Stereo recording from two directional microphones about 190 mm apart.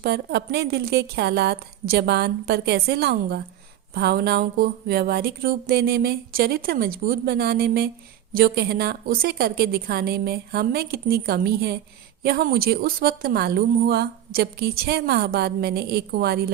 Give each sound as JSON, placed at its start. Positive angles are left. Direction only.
{"t": 0.0, "sound": "a woman's voice", "side_deg": -60}